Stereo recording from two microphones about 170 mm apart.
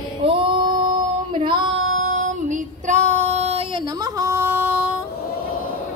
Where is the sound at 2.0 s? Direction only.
45° right (ahead or behind); by 4.9 s 10° right (ahead or behind).